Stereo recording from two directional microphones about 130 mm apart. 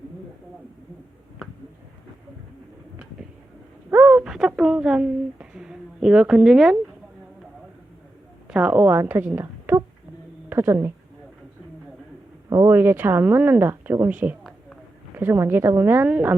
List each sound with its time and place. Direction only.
3.9 s a sound: 10° right (ahead or behind)
8.4 s a woman's voice: 10° right (ahead or behind)
12.5 s speech: 20° right (ahead or behind)